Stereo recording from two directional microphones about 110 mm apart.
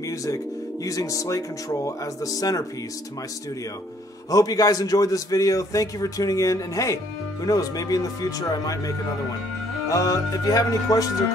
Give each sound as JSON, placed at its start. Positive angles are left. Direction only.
{"t": 0.0, "sound": "music", "side_deg": 30}
{"t": 0.8, "sound": "a man's voice", "side_deg": 30}
{"t": 4.3, "sound": "a man's voice", "side_deg": 35}